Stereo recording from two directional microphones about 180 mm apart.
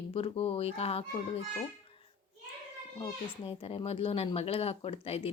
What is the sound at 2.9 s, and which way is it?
A woman's voice, 30° left (ahead or behind).